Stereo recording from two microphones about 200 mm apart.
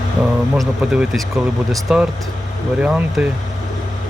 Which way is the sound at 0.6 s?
5° right (ahead or behind).